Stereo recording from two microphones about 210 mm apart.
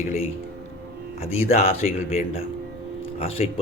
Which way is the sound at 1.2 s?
30° left (ahead or behind).